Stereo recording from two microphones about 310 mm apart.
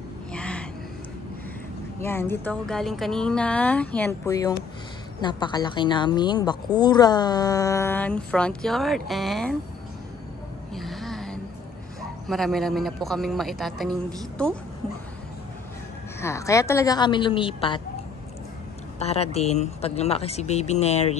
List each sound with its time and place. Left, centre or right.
0.3 s a sound: centre
2.0 s a woman's voice: centre
10.7 s a sound: centre
12.3 s speech: centre
16.2 s a woman's voice: centre
18.9 s speech: centre